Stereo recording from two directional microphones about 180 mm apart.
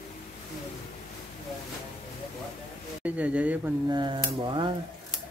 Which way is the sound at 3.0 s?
5° right (ahead or behind).